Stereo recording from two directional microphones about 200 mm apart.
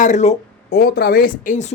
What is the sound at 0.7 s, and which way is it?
Speech, 50° left (ahead or behind).